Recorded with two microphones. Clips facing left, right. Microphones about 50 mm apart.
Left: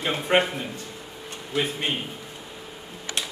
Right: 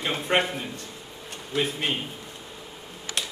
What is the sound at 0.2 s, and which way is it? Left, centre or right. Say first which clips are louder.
A man's voice: left 3 dB; centre.